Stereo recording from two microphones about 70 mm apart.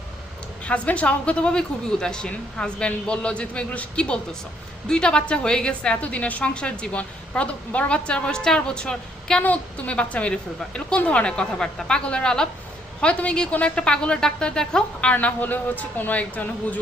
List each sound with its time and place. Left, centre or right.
0.6 s a woman's voice: centre
15.1 s a man's voice: left